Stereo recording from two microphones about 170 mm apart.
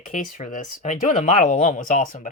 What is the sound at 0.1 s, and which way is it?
Speech, 50° left (ahead or behind).